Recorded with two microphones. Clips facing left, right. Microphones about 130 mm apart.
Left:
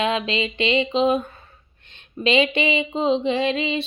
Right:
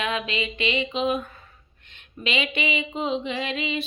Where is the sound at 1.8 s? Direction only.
30° left (ahead or behind).